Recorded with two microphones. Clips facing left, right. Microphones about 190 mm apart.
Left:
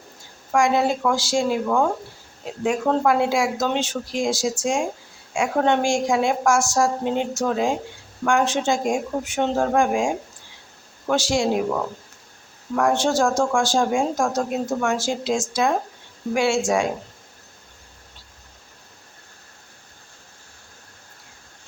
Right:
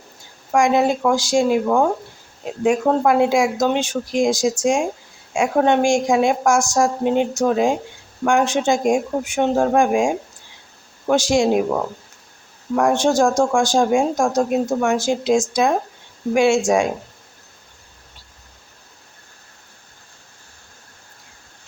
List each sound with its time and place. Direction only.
0.5 s a woman's voice: 15° right (ahead or behind)
11.1 s a woman's voice: 15° right (ahead or behind)